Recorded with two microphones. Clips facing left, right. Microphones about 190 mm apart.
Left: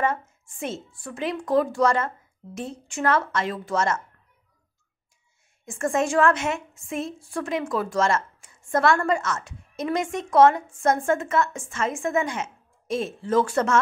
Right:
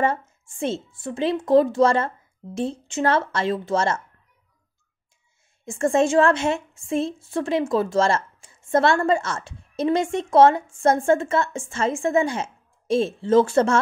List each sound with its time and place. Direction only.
0.0 s a woman's voice: 30° right (ahead or behind)
5.7 s a woman's voice: 25° right (ahead or behind)